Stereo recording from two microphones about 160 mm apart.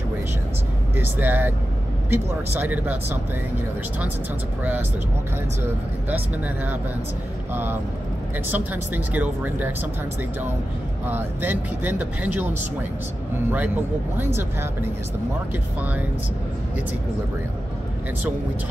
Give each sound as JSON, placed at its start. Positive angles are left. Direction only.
{"t": 0.9, "sound": "speech", "side_deg": -10}
{"t": 5.6, "sound": "speech", "side_deg": -10}
{"t": 11.1, "sound": "speech", "side_deg": -10}